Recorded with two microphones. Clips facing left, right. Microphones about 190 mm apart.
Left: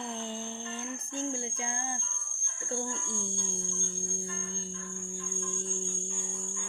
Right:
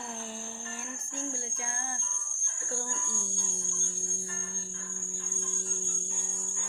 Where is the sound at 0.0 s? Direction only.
20° left (ahead or behind).